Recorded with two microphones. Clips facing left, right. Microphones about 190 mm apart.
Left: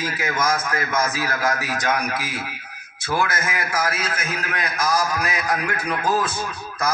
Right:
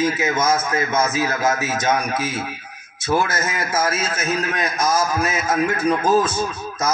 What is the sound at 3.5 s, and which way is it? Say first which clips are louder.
A man's voice: right 3 dB; 25° right (ahead or behind).